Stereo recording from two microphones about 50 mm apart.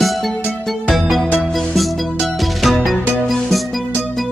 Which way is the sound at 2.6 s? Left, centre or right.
Centre.